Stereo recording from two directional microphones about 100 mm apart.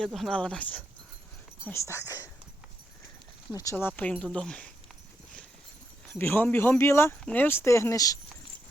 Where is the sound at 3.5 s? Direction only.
35° left (ahead or behind).